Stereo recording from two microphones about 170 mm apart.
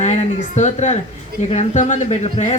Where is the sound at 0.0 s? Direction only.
45° left (ahead or behind).